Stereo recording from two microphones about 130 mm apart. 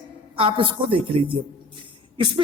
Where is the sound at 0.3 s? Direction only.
45° right (ahead or behind).